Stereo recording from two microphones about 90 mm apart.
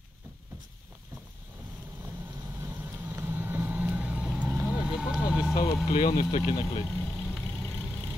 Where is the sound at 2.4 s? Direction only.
35° right (ahead or behind).